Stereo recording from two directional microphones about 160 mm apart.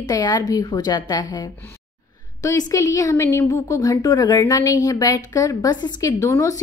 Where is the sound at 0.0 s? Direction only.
25° left (ahead or behind).